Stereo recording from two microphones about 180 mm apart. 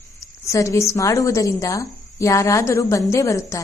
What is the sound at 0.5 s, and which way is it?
A woman's voice, 15° left (ahead or behind).